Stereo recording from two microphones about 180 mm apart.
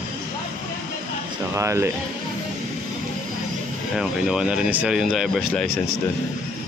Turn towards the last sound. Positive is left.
turn(degrees=0)  # may be behind; listen again after turning